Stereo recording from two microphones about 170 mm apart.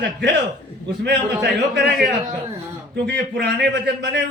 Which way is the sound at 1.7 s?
75° right (ahead or behind).